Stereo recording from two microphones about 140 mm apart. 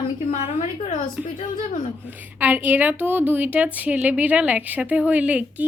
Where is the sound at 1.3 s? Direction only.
70° left (ahead or behind).